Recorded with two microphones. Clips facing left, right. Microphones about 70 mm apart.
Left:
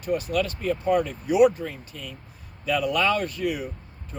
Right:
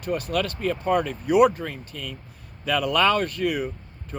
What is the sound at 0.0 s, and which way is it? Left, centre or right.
Speech, right.